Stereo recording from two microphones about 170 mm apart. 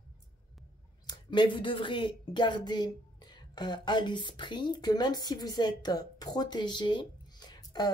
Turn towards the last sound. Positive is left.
turn(degrees=25)  # may be behind; listen again after turning